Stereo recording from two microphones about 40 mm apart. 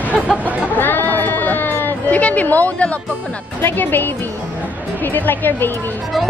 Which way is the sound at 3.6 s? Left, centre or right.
Left.